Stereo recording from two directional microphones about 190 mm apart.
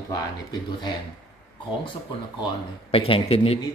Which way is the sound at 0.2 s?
25° left (ahead or behind).